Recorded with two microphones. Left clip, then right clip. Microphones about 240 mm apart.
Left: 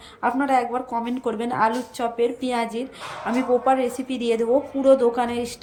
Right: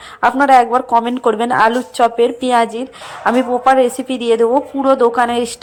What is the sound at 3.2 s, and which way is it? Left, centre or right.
Speech, right.